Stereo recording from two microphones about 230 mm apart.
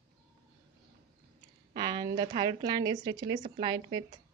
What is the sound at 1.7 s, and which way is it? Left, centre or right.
Speech, centre.